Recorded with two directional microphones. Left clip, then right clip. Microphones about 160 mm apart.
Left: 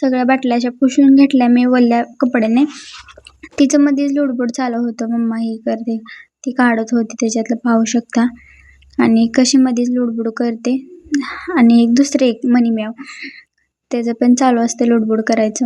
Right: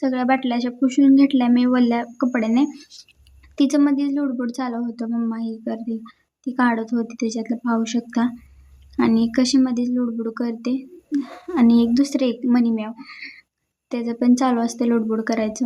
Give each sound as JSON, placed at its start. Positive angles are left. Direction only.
{"t": 0.0, "sound": "speech", "side_deg": 25}
{"t": 13.0, "sound": "speech", "side_deg": 15}
{"t": 13.9, "sound": "speech", "side_deg": 25}